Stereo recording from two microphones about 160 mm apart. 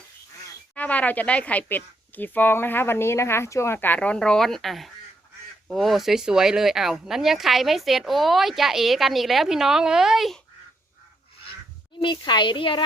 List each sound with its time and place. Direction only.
0.8 s speech: 10° left (ahead or behind)
11.9 s a child's voice: 30° left (ahead or behind)